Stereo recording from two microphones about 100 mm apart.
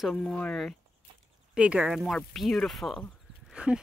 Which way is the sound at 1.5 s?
10° right (ahead or behind).